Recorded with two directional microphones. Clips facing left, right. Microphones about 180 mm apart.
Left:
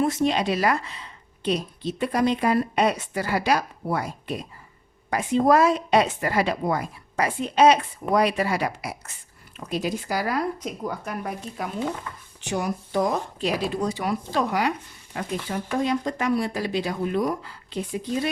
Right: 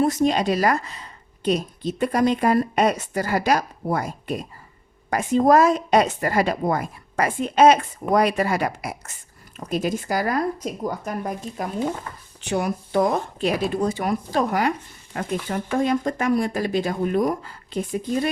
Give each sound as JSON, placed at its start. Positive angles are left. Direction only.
{"t": 0.0, "sound": "speech", "side_deg": -40}
{"t": 12.5, "sound": "speech", "side_deg": -60}